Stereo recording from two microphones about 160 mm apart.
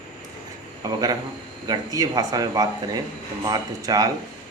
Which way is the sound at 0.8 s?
20° right (ahead or behind).